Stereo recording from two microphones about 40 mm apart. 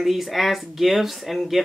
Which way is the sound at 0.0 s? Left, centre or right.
Centre.